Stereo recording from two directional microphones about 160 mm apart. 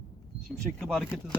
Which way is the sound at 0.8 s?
5° left (ahead or behind).